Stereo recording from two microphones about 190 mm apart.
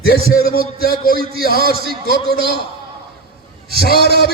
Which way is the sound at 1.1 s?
50° right (ahead or behind).